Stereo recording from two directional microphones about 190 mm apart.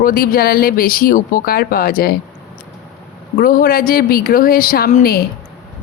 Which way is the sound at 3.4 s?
45° left (ahead or behind).